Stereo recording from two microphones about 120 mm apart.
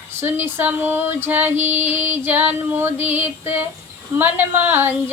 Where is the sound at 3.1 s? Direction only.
20° right (ahead or behind).